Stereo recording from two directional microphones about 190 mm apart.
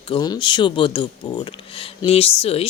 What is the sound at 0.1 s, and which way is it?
Speech, 25° left (ahead or behind).